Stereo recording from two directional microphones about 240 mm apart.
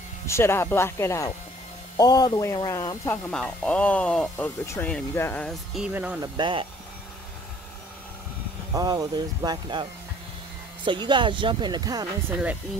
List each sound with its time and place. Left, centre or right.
0.3 s speech: centre
6.3 s speech: right
8.7 s speech: centre